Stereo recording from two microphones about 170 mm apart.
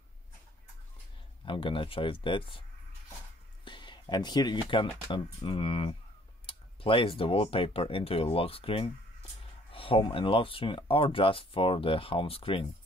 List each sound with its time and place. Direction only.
1.4 s speech: 30° left (ahead or behind)
3.6 s speech: 30° left (ahead or behind)